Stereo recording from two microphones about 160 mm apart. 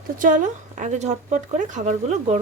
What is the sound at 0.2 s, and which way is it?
Speech, 55° right (ahead or behind).